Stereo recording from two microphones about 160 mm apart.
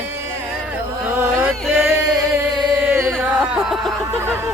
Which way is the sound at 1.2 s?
15° right (ahead or behind).